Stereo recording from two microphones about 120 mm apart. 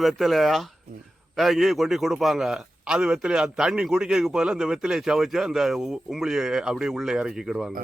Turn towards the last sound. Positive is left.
turn(degrees=-5)  # may be behind; listen again after turning